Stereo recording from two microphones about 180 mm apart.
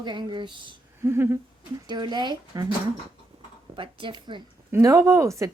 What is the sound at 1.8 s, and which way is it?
Speech, 25° right (ahead or behind).